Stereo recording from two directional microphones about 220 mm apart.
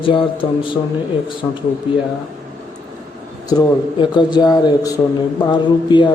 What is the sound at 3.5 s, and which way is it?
A man's voice, 20° left (ahead or behind).